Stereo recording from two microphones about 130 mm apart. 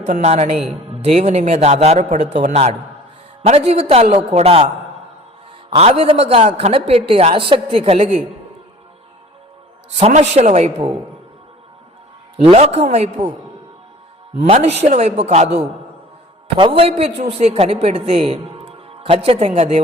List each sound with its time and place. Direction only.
0.0 s a man's voice: 60° right (ahead or behind)
5.7 s a man's voice: 50° right (ahead or behind)
9.9 s a man's voice: 60° right (ahead or behind)
12.5 s a man's voice: 55° right (ahead or behind)
14.4 s a man's voice: 55° right (ahead or behind)
16.6 s a man's voice: 45° right (ahead or behind)